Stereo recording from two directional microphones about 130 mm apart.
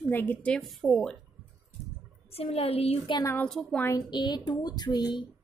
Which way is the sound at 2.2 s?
50° left (ahead or behind).